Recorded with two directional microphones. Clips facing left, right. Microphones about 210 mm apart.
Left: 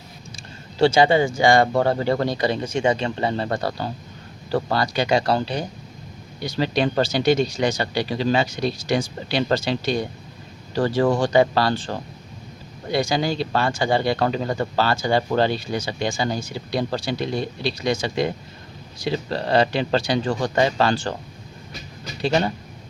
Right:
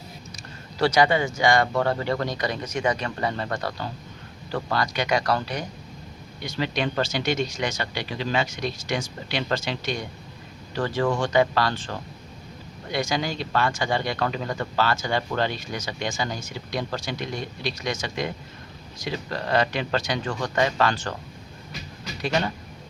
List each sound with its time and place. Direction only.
0.3 s speech: 25° left (ahead or behind)
22.2 s speech: 30° left (ahead or behind)